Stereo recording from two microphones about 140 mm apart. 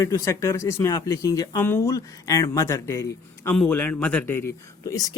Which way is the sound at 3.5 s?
10° left (ahead or behind).